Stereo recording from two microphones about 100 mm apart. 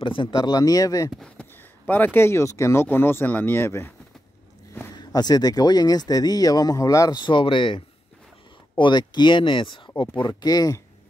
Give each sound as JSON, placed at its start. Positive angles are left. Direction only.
{"t": 0.0, "sound": "speech", "side_deg": 55}
{"t": 1.6, "sound": "speech", "side_deg": 20}
{"t": 4.9, "sound": "speech", "side_deg": 40}
{"t": 7.2, "sound": "speech", "side_deg": 55}